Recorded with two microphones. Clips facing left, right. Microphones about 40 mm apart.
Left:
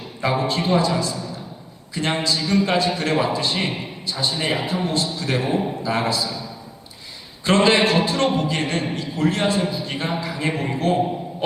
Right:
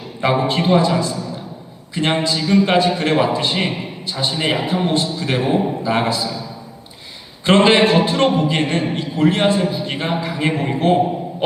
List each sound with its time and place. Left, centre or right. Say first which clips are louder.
0.2 s a man's voice: right 4 dB; right
2.4 s speech: right 6 dB; centre
2.6 s a man's voice: right 5 dB; right
3.7 s a sound: right 3 dB; centre
4.2 s a man's voice: right 3 dB; right
5.5 s a man's voice: right 4 dB; centre
5.9 s a man's voice: right 3 dB; right
6.2 s a man's voice: right 3 dB; centre
7.4 s a man's voice: right 4 dB; right
8.6 s a man's voice: right 4 dB; centre